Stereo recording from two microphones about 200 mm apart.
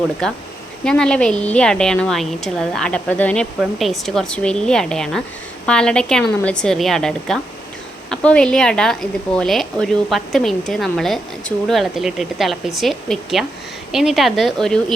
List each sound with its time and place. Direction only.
0.2 s speech: centre (ahead or behind)